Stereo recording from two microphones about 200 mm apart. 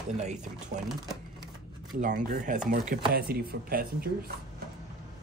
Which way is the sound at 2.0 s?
40° right (ahead or behind).